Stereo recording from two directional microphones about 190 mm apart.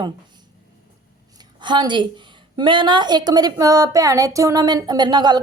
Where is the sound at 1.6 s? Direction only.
25° right (ahead or behind).